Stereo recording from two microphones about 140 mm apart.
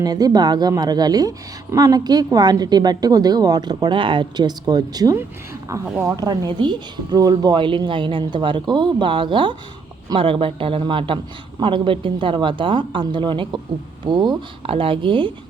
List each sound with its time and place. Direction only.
0.0 s a woman's voice: 25° right (ahead or behind)